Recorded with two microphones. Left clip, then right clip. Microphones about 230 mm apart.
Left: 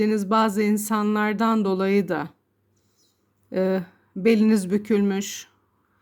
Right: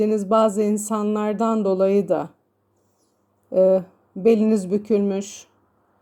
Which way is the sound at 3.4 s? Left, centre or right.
Left.